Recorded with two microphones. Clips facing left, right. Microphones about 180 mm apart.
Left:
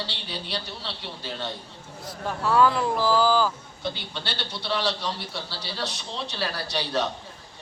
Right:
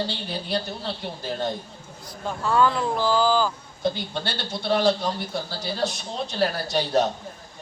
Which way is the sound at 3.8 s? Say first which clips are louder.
Right 7 dB; 50° right (ahead or behind).